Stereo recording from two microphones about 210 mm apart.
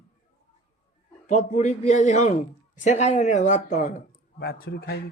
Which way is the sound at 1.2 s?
35° left (ahead or behind).